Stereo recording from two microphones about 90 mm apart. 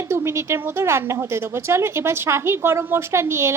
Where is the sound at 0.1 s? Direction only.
30° right (ahead or behind).